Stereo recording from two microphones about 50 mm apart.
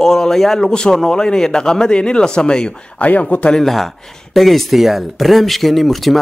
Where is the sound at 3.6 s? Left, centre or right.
Centre.